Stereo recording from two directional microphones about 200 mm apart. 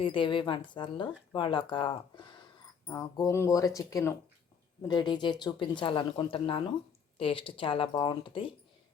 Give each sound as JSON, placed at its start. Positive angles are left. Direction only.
{"t": 0.0, "sound": "speech", "side_deg": 25}